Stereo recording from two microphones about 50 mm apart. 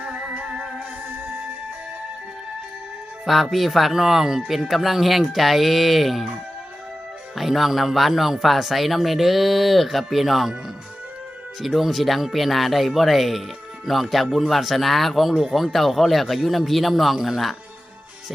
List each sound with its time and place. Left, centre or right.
0.1 s music: right
3.5 s speech: centre
7.3 s speech: centre
11.6 s speech: centre